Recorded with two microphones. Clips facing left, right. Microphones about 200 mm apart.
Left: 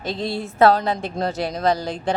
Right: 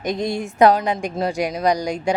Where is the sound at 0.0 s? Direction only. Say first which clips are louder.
Right 3 dB; 15° right (ahead or behind).